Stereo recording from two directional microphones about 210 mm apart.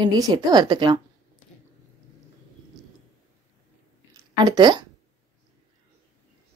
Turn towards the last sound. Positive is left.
turn(degrees=-20)  # may be behind; listen again after turning